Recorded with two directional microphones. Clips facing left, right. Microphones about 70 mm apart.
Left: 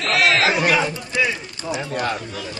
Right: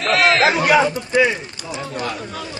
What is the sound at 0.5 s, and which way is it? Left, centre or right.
A man's voice, right.